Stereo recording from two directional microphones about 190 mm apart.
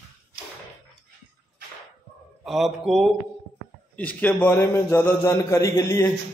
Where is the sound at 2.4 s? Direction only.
Centre (ahead or behind); by 6.0 s 15° left (ahead or behind).